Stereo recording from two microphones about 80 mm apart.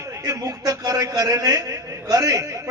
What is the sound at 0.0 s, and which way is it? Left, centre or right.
A man's voice, right.